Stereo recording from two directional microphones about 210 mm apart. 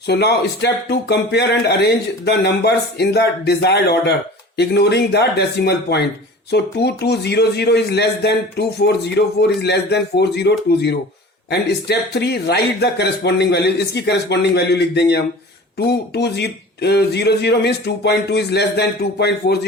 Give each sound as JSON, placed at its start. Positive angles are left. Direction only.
{"t": 0.1, "sound": "a man's voice", "side_deg": 50}